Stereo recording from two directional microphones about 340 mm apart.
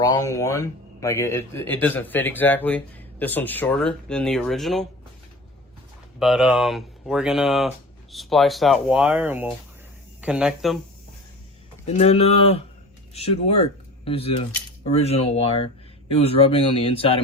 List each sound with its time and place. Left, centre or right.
0.0 s speech: centre
6.1 s speech: centre
11.9 s speech: centre